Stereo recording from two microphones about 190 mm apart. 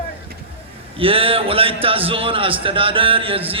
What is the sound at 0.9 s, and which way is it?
A man's voice, 30° right (ahead or behind).